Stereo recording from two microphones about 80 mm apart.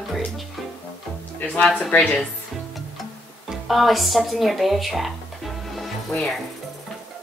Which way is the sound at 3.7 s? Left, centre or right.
Centre.